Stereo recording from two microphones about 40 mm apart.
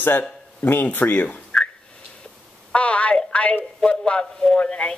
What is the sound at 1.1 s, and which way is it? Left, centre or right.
Speech, left.